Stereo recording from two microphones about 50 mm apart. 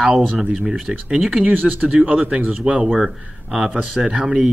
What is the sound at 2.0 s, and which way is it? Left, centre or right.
Speech, right.